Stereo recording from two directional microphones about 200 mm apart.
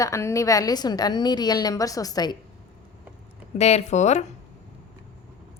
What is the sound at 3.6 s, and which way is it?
Speech, 30° left (ahead or behind).